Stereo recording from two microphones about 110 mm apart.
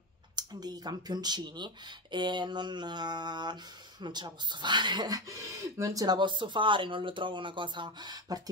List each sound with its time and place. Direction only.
0.4 s speech: 40° right (ahead or behind)